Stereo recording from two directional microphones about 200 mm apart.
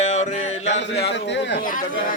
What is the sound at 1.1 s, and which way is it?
Speech, 60° left (ahead or behind).